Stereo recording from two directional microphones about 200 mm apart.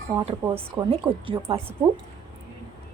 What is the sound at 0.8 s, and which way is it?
Speech, 25° right (ahead or behind).